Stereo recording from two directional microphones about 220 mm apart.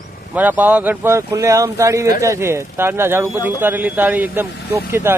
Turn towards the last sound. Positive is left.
turn(degrees=-10)  # may be behind; listen again after turning